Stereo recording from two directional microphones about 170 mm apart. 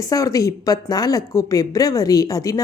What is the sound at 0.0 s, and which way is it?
A woman's voice, 20° left (ahead or behind).